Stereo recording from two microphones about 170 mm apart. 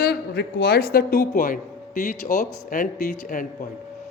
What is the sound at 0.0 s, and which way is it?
A woman's voice, 70° left (ahead or behind).